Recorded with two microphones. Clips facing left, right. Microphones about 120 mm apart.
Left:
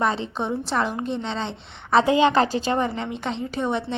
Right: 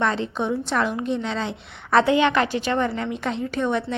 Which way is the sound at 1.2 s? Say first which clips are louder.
Right 2 dB; 30° left (ahead or behind).